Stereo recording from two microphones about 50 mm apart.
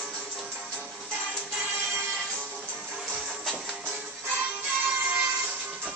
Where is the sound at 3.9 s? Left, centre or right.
Right.